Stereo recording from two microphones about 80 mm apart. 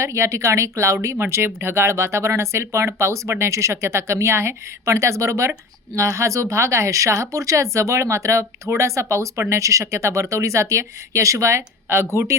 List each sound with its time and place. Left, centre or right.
0.0 s speech: right